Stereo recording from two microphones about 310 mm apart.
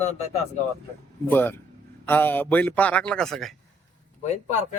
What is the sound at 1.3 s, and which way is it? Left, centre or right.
A man's voice, centre.